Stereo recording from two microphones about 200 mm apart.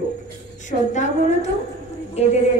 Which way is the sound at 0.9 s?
35° left (ahead or behind).